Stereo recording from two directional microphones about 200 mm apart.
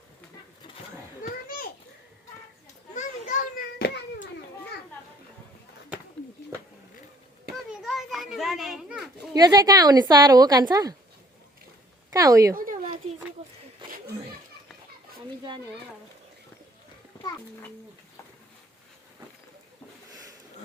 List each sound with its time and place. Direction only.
1.2 s children playing: 45° left (ahead or behind)
2.9 s children playing: 40° left (ahead or behind)
7.7 s children playing: centre (ahead or behind)
9.3 s a woman's voice: 20° right (ahead or behind)
12.1 s speech: 15° right (ahead or behind)
13.8 s roaring cats: 25° right (ahead or behind)